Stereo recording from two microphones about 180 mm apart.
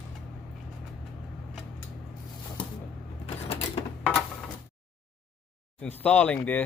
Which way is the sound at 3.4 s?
35° left (ahead or behind).